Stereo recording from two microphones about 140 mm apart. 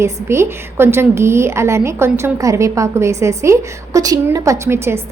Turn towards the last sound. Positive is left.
turn(degrees=-20)  # may be behind; listen again after turning